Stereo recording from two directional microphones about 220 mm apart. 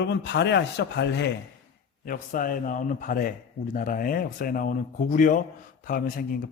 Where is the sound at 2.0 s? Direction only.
40° left (ahead or behind).